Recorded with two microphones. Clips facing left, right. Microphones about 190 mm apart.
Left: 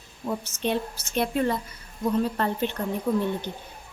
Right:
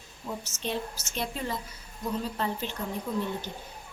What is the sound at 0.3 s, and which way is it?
Speech, 60° left (ahead or behind).